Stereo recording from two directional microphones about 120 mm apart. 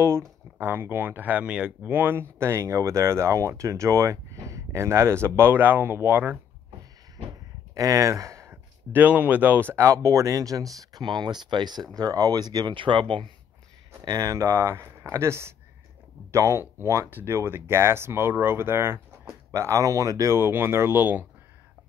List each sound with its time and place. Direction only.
0.6 s speech: 20° right (ahead or behind)
7.7 s speech: 30° right (ahead or behind); by 13.3 s 45° right (ahead or behind)
14.0 s speech: 30° right (ahead or behind); by 21.3 s 15° right (ahead or behind)